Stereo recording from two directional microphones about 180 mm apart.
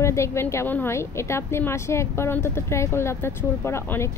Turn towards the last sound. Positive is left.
turn(degrees=15)  # may be behind; listen again after turning